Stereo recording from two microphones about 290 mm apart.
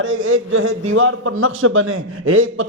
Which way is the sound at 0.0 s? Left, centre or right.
Right.